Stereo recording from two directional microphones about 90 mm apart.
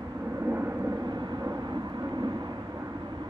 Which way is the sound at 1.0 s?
50° right (ahead or behind).